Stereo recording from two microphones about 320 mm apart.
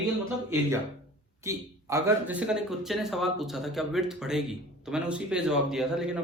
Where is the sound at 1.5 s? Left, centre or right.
Centre.